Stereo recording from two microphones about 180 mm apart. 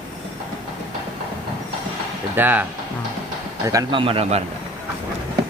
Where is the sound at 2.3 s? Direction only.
10° right (ahead or behind).